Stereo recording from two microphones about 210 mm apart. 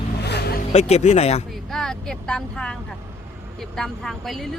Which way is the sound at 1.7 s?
Centre (ahead or behind).